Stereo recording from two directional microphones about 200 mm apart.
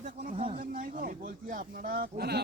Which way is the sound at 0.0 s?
40° right (ahead or behind).